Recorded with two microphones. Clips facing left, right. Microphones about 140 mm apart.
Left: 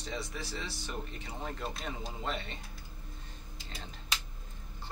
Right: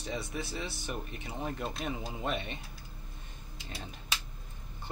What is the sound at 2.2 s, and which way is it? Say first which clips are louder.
Speech: right 3 dB; 20° right (ahead or behind).